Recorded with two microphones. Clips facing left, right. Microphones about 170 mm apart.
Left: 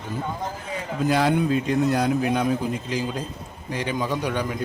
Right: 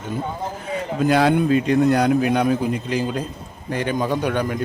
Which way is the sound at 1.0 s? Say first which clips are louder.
Right 4 dB; 65° right (ahead or behind).